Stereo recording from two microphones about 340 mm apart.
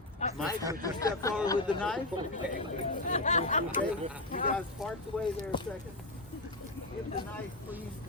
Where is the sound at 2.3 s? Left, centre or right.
Left.